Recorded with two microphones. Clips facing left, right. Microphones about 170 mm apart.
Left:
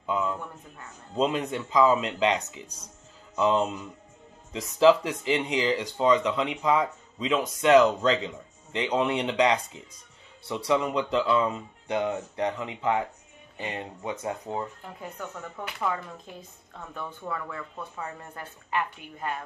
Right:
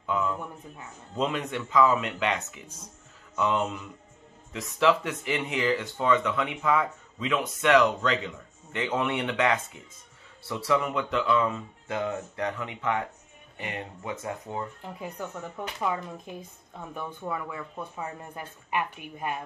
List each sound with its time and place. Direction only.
0.0 s speech: 20° left (ahead or behind)
14.8 s a woman's voice: 15° right (ahead or behind)